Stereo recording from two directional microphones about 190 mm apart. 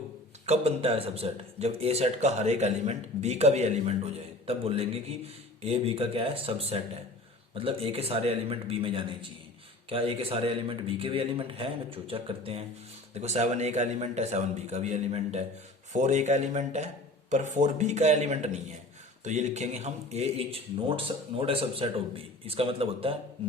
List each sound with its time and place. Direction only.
0.4 s a man's voice: 35° right (ahead or behind)